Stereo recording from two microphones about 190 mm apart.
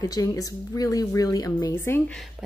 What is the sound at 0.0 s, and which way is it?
Speech, 20° left (ahead or behind).